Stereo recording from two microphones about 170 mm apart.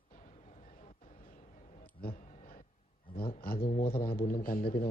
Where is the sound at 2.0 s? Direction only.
60° left (ahead or behind).